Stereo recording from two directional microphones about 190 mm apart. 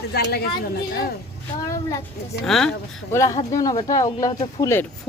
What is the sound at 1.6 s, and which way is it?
Speech, 20° left (ahead or behind).